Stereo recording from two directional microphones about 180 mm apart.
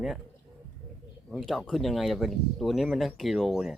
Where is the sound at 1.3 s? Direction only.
Centre (ahead or behind).